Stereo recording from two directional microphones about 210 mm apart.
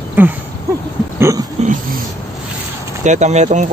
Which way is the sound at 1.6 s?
30° right (ahead or behind).